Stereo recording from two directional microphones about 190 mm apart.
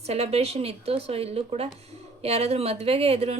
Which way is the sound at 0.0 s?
35° right (ahead or behind).